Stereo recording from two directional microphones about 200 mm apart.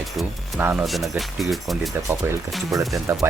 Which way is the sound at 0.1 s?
Centre (ahead or behind).